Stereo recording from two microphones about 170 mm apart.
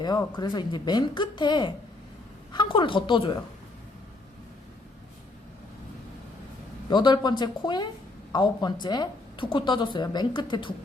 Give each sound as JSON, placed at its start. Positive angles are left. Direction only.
{"t": 0.0, "sound": "a woman's voice", "side_deg": 25}
{"t": 6.9, "sound": "a woman's voice", "side_deg": 25}